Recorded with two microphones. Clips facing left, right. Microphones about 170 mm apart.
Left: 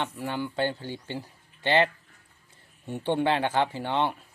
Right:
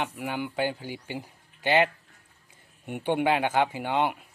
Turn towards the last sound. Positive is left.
turn(degrees=-15)  # may be behind; listen again after turning